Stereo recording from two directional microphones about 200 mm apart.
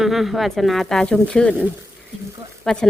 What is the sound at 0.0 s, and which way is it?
Speech, centre (ahead or behind).